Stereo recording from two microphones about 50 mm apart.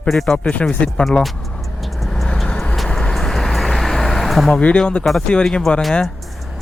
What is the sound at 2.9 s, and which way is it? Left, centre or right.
Vehicle, centre.